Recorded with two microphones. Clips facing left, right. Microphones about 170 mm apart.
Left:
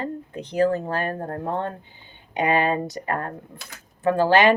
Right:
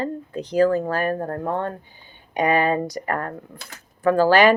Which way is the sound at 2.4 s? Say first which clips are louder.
Right 2 dB; 25° left (ahead or behind).